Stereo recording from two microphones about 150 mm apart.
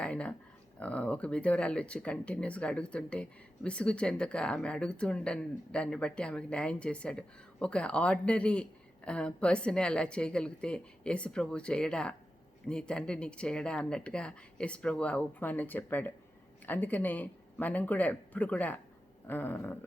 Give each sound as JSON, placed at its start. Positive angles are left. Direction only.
{"t": 0.0, "sound": "speech", "side_deg": 10}